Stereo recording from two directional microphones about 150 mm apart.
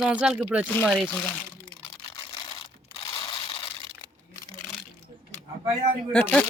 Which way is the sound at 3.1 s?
35° left (ahead or behind).